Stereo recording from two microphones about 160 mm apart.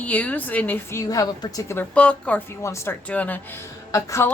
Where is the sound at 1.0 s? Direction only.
20° left (ahead or behind).